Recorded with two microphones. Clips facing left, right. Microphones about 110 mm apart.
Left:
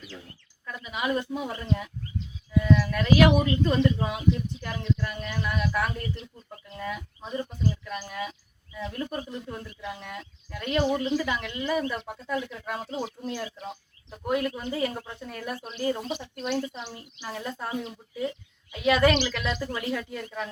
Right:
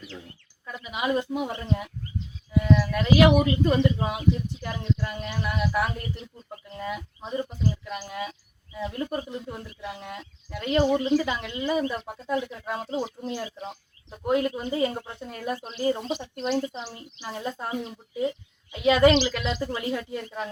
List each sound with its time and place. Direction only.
0.6 s a woman's voice: 20° right (ahead or behind)
10.0 s a woman's voice: 20° right (ahead or behind)
17.3 s a woman's voice: 15° right (ahead or behind)